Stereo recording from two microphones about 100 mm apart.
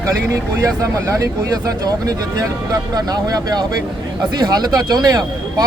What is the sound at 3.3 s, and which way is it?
Speech, 45° right (ahead or behind).